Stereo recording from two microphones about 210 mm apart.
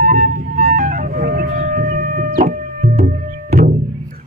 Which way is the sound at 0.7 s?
40° right (ahead or behind).